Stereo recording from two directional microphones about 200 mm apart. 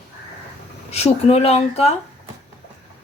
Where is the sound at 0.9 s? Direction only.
30° left (ahead or behind).